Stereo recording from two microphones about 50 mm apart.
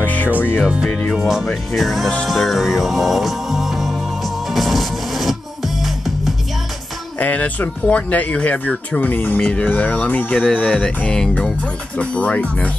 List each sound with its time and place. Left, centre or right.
0.0 s music: left
0.8 s speech: centre
1.1 s speech: centre
2.2 s music: centre
7.2 s speech: left
9.4 s speech: left